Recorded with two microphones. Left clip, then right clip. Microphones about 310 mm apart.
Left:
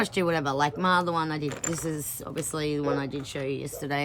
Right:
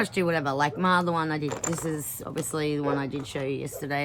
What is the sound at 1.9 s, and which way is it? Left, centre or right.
Speech, centre.